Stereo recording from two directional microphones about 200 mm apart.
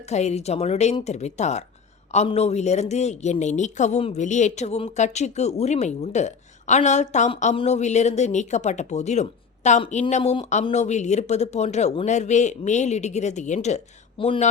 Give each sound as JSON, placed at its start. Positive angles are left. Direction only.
{"t": 0.0, "sound": "speech", "side_deg": 35}